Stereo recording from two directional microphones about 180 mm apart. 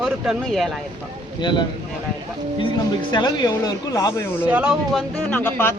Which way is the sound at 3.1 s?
25° left (ahead or behind).